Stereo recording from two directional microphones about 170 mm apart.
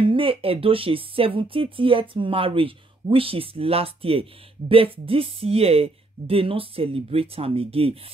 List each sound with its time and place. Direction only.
0.0 s speech: 30° right (ahead or behind)